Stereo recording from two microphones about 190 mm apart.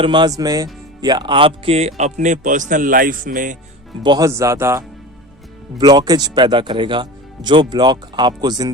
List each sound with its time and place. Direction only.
0.0 s speech: 25° right (ahead or behind); by 3.6 s 45° right (ahead or behind)
4.0 s speech: 20° right (ahead or behind)
5.8 s speech: 20° right (ahead or behind)